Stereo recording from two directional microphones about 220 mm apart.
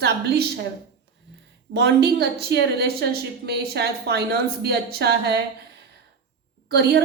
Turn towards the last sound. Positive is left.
turn(degrees=-50)  # may be behind; listen again after turning